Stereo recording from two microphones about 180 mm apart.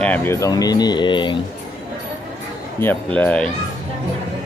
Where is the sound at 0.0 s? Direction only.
10° left (ahead or behind); by 1.4 s 25° left (ahead or behind).